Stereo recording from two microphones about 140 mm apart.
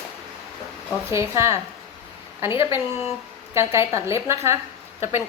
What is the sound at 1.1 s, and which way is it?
A woman's voice, 20° right (ahead or behind).